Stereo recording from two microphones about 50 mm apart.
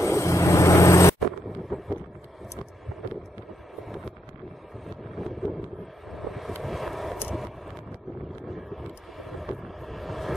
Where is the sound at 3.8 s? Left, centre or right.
Centre.